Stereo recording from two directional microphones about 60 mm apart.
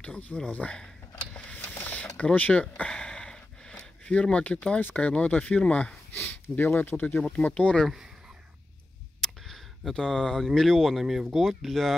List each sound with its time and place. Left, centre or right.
0.0 s speech: left
1.3 s a sound: centre
2.1 s speech: left
2.8 s a sound: centre
4.0 s speech: centre
6.1 s speech: left
7.4 s speech: centre
9.2 s speech: centre